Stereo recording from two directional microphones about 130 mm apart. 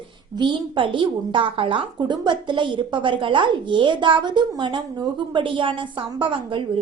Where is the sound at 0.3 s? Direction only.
35° right (ahead or behind).